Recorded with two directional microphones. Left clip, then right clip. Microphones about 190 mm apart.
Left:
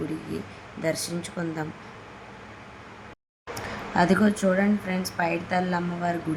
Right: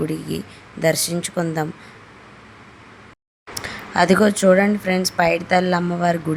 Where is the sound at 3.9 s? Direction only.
35° right (ahead or behind).